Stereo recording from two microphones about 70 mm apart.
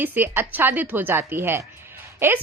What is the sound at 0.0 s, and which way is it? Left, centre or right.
A woman's voice, right.